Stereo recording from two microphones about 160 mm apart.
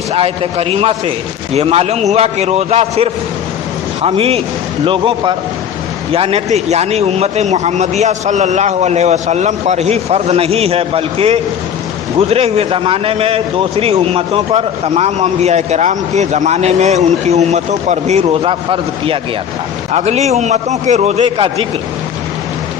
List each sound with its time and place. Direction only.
0.1 s a man's voice: 40° right (ahead or behind)